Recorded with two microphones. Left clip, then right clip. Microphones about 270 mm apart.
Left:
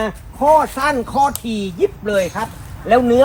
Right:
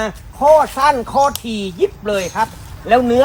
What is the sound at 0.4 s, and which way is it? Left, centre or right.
Speech, right.